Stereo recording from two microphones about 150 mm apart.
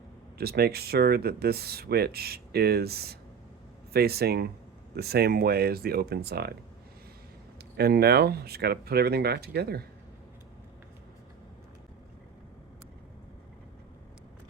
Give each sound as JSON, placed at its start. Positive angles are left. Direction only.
{"t": 0.3, "sound": "speech", "side_deg": -90}
{"t": 7.8, "sound": "speech", "side_deg": -90}